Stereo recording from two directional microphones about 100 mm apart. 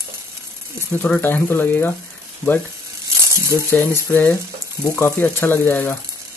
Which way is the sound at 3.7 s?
20° left (ahead or behind).